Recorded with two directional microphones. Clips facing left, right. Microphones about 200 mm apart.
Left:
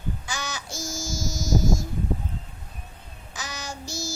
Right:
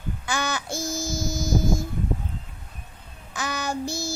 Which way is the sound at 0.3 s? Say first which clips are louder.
Right 6 dB; 60° right (ahead or behind).